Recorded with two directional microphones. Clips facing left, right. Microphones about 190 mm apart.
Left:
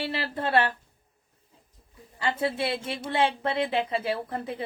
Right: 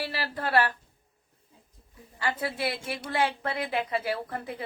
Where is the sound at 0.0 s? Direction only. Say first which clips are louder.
Left 2 dB; 25° left (ahead or behind).